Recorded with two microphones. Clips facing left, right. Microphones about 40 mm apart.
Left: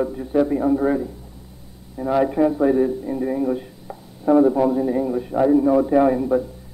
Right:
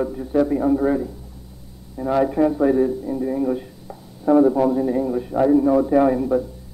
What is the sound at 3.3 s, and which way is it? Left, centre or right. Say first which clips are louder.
A man's voice: even; centre.